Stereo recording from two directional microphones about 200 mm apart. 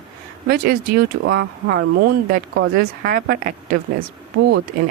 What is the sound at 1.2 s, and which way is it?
Speech, 60° right (ahead or behind).